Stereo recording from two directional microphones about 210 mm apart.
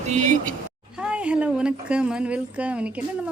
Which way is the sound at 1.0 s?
5° right (ahead or behind).